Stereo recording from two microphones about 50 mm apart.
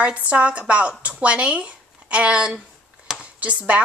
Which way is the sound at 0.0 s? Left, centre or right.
Right.